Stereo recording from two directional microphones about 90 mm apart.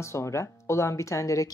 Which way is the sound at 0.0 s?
30° left (ahead or behind).